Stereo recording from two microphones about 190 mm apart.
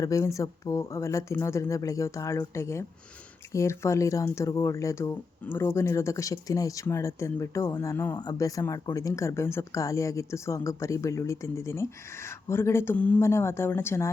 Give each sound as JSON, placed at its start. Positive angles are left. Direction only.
{"t": 0.0, "sound": "speech", "side_deg": 15}